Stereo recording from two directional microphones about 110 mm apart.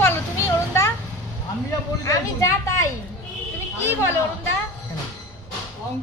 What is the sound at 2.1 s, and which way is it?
Speech, 25° left (ahead or behind).